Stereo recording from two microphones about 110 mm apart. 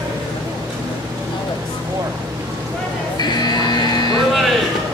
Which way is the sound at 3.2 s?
40° left (ahead or behind).